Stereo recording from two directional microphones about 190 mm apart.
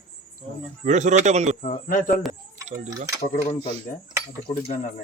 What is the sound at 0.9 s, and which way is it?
Speech, 40° right (ahead or behind).